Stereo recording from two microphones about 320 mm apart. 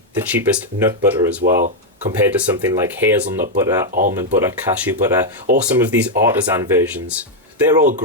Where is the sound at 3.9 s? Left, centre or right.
Right.